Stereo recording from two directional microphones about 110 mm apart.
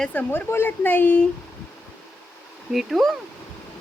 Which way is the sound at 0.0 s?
15° left (ahead or behind).